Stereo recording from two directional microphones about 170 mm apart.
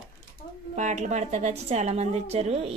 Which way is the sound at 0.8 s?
45° right (ahead or behind).